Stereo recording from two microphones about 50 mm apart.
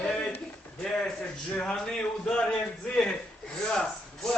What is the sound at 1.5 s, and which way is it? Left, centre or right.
A man's voice, centre.